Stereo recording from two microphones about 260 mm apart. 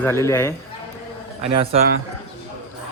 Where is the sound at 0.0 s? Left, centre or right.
Centre.